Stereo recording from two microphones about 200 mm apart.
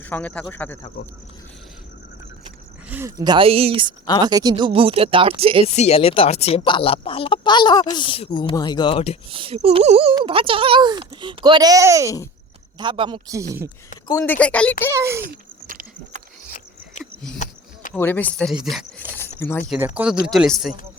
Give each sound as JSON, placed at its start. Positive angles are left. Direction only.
{"t": 0.0, "sound": "speech", "side_deg": 10}
{"t": 2.9, "sound": "speech", "side_deg": -15}
{"t": 5.6, "sound": "speech", "side_deg": 30}
{"t": 9.3, "sound": "speech", "side_deg": -25}
{"t": 14.1, "sound": "speech", "side_deg": 15}
{"t": 14.9, "sound": "a child's voice", "side_deg": -15}
{"t": 15.6, "sound": "a sound", "side_deg": -45}
{"t": 17.3, "sound": "a sound", "side_deg": 40}
{"t": 17.9, "sound": "speech", "side_deg": 10}
{"t": 19.4, "sound": "speech", "side_deg": 10}
{"t": 20.2, "sound": "speech", "side_deg": 0}